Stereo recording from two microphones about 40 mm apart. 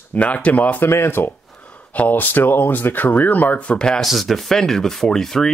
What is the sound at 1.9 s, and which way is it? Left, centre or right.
Speech, left.